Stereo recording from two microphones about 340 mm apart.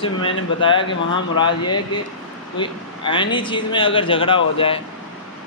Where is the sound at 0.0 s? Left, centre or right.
Centre.